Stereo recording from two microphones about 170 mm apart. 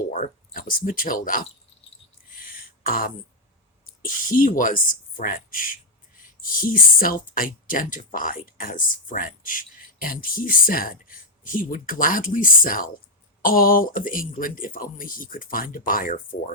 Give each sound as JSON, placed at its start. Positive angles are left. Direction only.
{"t": 0.1, "sound": "speech", "side_deg": 55}
{"t": 2.3, "sound": "a sound", "side_deg": 55}
{"t": 3.8, "sound": "speech", "side_deg": 55}